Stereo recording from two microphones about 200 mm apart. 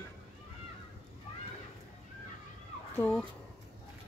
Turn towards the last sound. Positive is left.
turn(degrees=10)  # may be behind; listen again after turning